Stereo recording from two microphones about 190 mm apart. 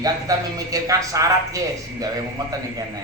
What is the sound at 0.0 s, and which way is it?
Speech, 20° right (ahead or behind).